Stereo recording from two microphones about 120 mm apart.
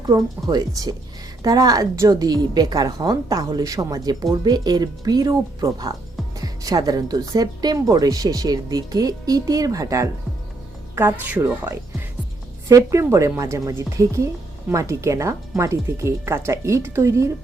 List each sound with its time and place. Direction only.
0.1 s a woman's voice: 30° right (ahead or behind)
10.9 s a woman's voice: 15° right (ahead or behind)